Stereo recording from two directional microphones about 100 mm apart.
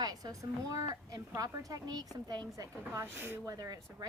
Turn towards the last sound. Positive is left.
turn(degrees=-35)  # may be behind; listen again after turning